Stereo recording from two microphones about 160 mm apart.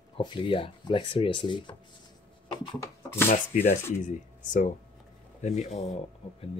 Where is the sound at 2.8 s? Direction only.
20° left (ahead or behind).